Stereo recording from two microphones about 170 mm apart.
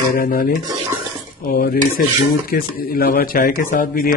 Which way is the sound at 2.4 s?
60° left (ahead or behind).